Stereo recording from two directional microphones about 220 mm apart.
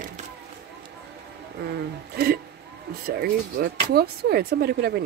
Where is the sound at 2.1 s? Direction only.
45° right (ahead or behind).